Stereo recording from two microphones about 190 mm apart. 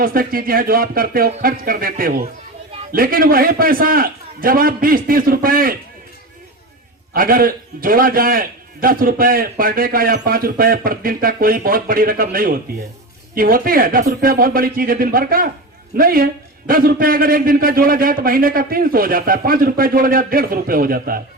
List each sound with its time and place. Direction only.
0.0 s a man's voice: 50° right (ahead or behind)
7.1 s a man's voice: 50° right (ahead or behind)